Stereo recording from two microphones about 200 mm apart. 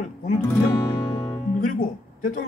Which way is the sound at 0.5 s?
10° left (ahead or behind).